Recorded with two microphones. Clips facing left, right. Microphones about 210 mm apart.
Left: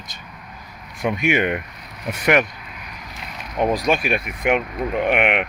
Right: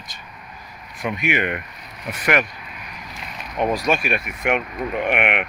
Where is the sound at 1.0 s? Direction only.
25° left (ahead or behind).